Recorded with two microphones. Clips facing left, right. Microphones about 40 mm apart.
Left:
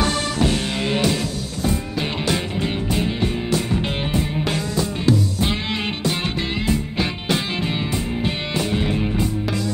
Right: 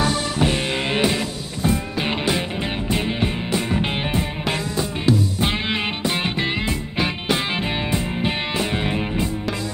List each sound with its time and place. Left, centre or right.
0.4 s music: right